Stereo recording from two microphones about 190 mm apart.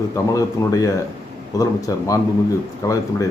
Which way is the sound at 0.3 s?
20° left (ahead or behind).